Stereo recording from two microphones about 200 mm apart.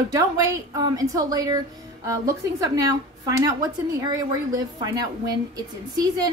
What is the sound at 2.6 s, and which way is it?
A woman's voice, 15° right (ahead or behind).